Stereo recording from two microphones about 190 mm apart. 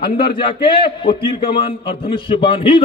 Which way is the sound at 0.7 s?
25° left (ahead or behind).